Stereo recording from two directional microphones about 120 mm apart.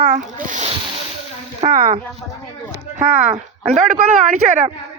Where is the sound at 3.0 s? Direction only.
70° right (ahead or behind).